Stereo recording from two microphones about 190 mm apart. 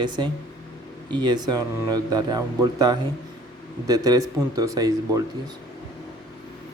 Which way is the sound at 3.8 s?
20° right (ahead or behind).